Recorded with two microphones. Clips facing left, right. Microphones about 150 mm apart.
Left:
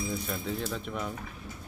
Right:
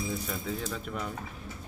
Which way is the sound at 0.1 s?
Centre (ahead or behind).